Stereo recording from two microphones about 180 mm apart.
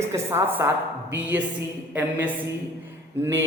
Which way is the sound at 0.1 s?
15° right (ahead or behind).